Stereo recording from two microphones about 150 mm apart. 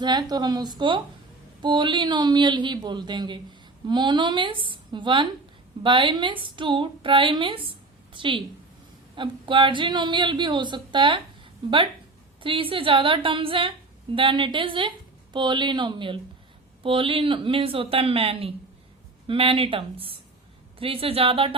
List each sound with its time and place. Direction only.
0.0 s a woman's voice: 30° right (ahead or behind)
12.4 s a woman's voice: 35° right (ahead or behind)